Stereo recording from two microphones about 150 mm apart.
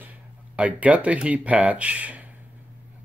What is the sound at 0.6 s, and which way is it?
Speech, 10° right (ahead or behind).